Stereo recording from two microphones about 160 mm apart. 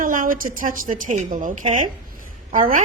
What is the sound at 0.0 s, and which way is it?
A woman's voice, 55° right (ahead or behind).